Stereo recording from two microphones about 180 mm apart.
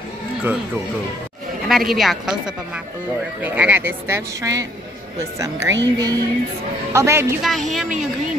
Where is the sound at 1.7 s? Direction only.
Centre (ahead or behind); by 5.7 s 15° right (ahead or behind).